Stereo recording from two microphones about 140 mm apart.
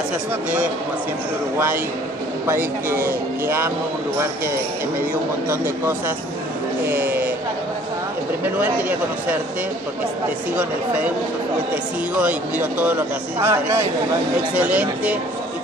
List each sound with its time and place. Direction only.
2.4 s speech: 15° right (ahead or behind)
5.5 s speech: 15° right (ahead or behind)
8.5 s speech: 10° right (ahead or behind)
10.5 s speech: 10° right (ahead or behind)
12.2 s speech: 10° right (ahead or behind)